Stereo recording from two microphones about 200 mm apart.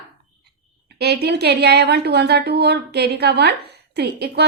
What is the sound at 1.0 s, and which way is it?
A woman's voice, 55° right (ahead or behind).